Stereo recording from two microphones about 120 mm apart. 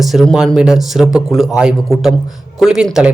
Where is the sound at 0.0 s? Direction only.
Centre (ahead or behind).